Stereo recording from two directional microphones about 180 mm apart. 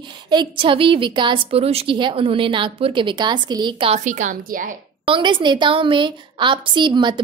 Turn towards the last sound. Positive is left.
turn(degrees=-25)  # may be behind; listen again after turning